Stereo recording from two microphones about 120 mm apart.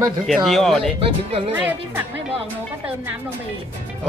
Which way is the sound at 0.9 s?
55° right (ahead or behind).